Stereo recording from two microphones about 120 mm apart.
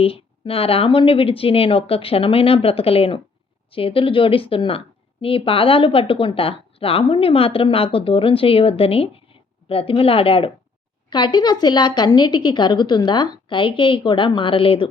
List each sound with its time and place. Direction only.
0.0 s speech: 50° left (ahead or behind)
11.1 s a woman's voice: 40° left (ahead or behind)